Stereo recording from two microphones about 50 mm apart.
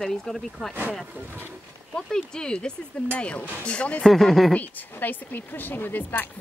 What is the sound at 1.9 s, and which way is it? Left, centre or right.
Speech, centre.